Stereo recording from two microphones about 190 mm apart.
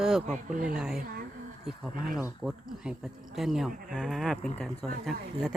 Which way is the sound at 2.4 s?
10° right (ahead or behind).